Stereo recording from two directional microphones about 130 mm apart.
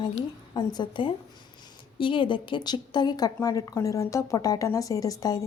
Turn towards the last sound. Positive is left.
turn(degrees=25)  # may be behind; listen again after turning